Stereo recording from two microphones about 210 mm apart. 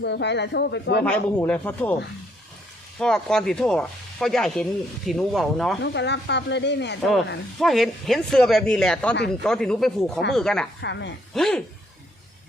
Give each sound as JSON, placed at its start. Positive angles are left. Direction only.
{"t": 0.0, "sound": "speech", "side_deg": 55}
{"t": 1.0, "sound": "speech", "side_deg": 5}
{"t": 3.0, "sound": "speech", "side_deg": 5}
{"t": 5.8, "sound": "speech", "side_deg": 55}
{"t": 7.6, "sound": "speech", "side_deg": 0}
{"t": 10.8, "sound": "speech", "side_deg": 55}
{"t": 11.3, "sound": "speech", "side_deg": 0}